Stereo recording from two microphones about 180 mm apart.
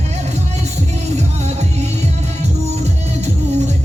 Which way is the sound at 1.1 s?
40° right (ahead or behind).